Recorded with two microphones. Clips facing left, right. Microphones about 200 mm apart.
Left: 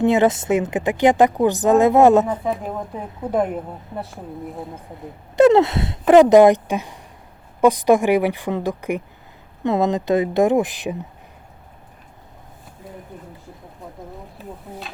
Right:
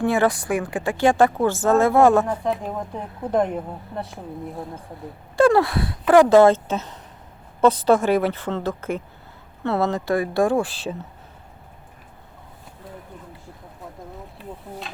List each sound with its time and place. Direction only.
0.0 s speech: 20° left (ahead or behind)
2.4 s a woman's voice: 5° left (ahead or behind)
5.4 s a woman's voice: 20° left (ahead or behind)